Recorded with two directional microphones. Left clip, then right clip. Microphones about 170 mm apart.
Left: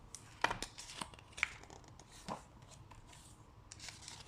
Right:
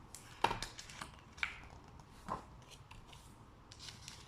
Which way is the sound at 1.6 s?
15° left (ahead or behind).